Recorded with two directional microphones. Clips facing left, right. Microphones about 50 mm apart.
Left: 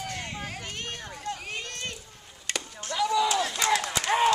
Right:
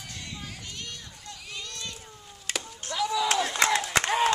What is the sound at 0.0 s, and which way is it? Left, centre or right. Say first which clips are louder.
Run: left 6 dB; left.